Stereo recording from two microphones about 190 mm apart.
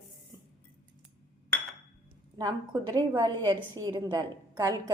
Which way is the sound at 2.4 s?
20° right (ahead or behind).